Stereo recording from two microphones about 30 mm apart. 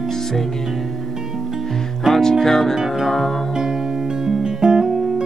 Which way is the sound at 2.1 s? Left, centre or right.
Centre.